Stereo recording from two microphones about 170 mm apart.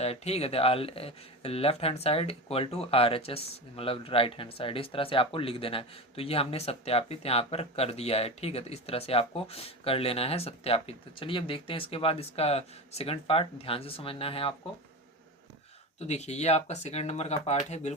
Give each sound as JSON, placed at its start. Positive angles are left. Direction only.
{"t": 0.0, "sound": "speech", "side_deg": 40}
{"t": 16.0, "sound": "speech", "side_deg": 40}